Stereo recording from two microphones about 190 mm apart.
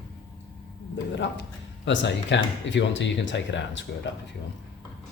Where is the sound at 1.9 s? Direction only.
70° left (ahead or behind).